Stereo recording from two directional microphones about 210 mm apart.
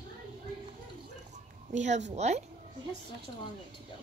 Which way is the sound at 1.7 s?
35° right (ahead or behind).